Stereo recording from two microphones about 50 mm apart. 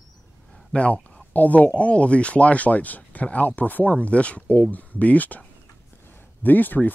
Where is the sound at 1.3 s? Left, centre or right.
Left.